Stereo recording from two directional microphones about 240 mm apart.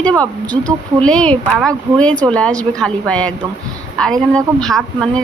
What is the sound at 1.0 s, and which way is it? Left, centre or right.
Speech, centre.